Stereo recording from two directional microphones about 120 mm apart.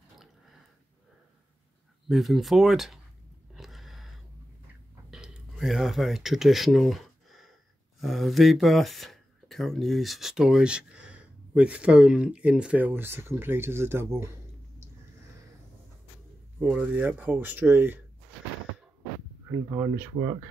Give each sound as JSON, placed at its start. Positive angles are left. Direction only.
{"t": 2.0, "sound": "speech", "side_deg": 0}
{"t": 3.5, "sound": "a sound", "side_deg": 0}
{"t": 5.1, "sound": "a sound", "side_deg": -5}
{"t": 8.0, "sound": "speech", "side_deg": 0}
{"t": 16.5, "sound": "speech", "side_deg": -15}
{"t": 19.7, "sound": "speech", "side_deg": -25}